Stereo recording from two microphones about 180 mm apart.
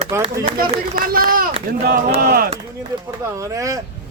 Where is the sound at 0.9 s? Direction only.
55° right (ahead or behind).